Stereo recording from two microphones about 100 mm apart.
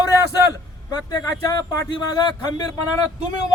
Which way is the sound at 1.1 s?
40° left (ahead or behind).